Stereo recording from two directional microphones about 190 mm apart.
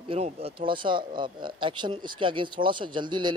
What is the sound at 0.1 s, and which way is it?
Speech, 30° right (ahead or behind).